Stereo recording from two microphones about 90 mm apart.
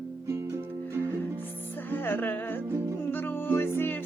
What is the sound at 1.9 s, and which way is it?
Music, 25° left (ahead or behind).